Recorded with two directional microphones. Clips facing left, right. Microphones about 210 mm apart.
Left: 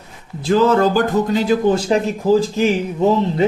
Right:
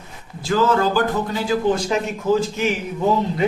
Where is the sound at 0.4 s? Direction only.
40° left (ahead or behind).